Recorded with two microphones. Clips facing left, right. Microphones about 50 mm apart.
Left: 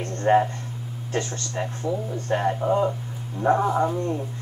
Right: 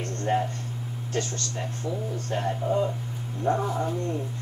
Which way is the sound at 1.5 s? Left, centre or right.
Left.